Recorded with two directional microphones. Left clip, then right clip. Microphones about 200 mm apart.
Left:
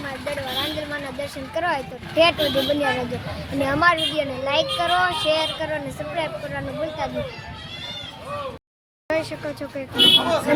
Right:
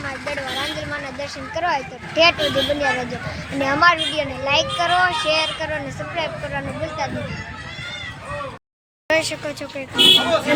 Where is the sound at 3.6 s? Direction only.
15° left (ahead or behind).